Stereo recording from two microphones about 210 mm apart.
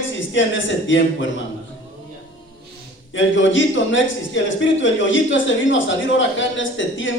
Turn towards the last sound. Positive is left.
turn(degrees=65)  # may be behind; listen again after turning